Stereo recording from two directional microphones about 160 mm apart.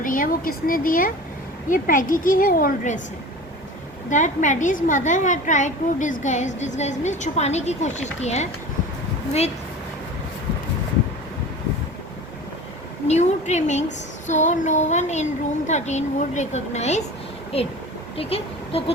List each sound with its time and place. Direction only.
0.0 s a woman's voice: 60° left (ahead or behind)
4.1 s a woman's voice: 50° left (ahead or behind)
13.1 s a woman's voice: 45° left (ahead or behind)